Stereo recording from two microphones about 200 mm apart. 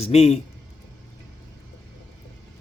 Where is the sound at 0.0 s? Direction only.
30° left (ahead or behind).